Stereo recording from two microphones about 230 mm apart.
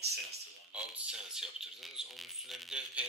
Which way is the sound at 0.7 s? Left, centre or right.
Centre.